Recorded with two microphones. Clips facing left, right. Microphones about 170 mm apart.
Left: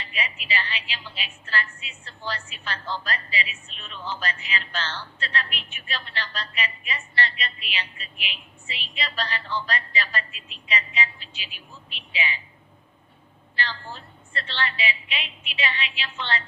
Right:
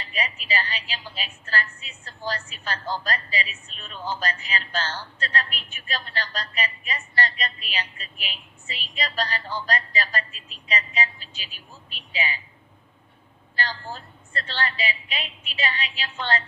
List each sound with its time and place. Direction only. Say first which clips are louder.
0.0 s a woman's voice: right 2 dB; 40° right (ahead or behind)
13.6 s a woman's voice: right 2 dB; 40° right (ahead or behind)